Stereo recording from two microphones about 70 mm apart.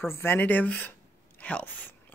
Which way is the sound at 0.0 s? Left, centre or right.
Left.